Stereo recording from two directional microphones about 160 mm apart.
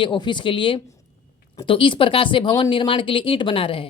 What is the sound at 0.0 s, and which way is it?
Speech, 30° left (ahead or behind).